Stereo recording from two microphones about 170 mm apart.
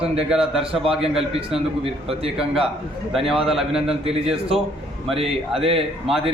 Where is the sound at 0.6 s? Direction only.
35° right (ahead or behind).